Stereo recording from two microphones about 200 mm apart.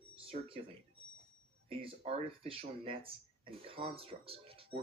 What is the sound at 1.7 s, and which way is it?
Speech, 30° right (ahead or behind).